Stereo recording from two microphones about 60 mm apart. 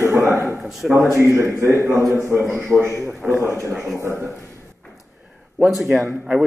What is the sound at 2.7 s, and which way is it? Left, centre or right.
Speech, centre.